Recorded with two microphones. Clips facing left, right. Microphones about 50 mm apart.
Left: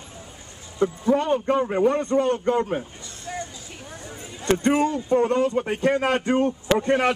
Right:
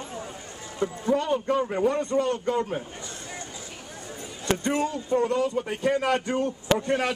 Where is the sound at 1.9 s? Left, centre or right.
Left.